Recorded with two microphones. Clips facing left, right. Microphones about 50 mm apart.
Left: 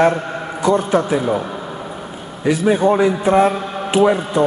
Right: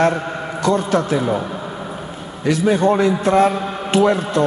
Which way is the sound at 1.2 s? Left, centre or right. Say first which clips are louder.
Left 1 dB; centre.